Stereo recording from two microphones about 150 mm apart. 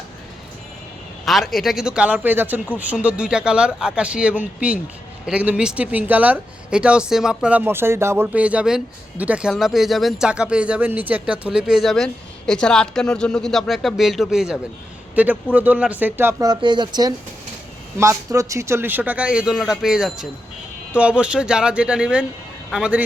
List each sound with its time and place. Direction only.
1.2 s a man's voice: centre (ahead or behind)
16.5 s a man's voice: 30° right (ahead or behind); by 23.0 s 10° right (ahead or behind)